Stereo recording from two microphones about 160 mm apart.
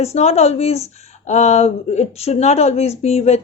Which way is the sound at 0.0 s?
40° left (ahead or behind).